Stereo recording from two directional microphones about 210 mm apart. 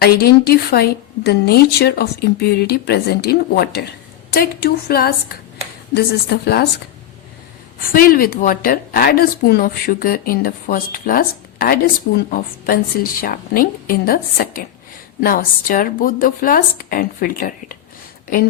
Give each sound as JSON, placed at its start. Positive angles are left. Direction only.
{"t": 0.0, "sound": "a woman's voice", "side_deg": 45}
{"t": 7.9, "sound": "a woman's voice", "side_deg": 45}